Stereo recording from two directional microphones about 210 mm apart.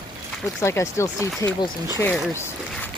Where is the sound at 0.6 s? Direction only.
15° left (ahead or behind).